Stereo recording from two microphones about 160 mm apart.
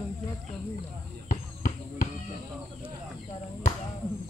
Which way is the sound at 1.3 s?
60° left (ahead or behind).